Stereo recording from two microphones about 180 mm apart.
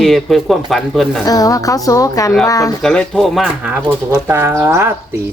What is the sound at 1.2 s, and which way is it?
A woman's voice, 20° left (ahead or behind).